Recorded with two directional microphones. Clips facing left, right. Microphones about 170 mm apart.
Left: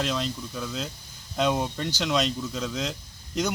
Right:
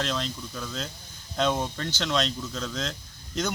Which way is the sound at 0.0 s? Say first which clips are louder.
Left 2 dB; 5° left (ahead or behind).